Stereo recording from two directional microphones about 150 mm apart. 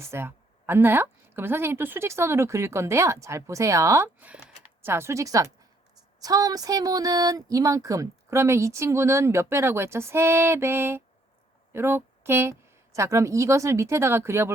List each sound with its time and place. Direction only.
0.0 s a woman's voice: 15° right (ahead or behind)